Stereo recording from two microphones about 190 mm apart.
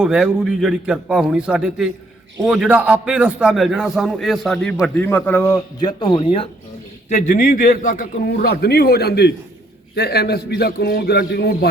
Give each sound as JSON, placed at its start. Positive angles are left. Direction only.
{"t": 0.0, "sound": "a man's voice", "side_deg": -5}
{"t": 7.3, "sound": "a man's voice", "side_deg": 45}